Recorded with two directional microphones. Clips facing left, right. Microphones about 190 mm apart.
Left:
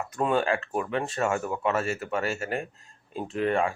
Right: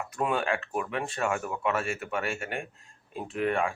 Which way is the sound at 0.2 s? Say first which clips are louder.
Left 3 dB; centre (ahead or behind).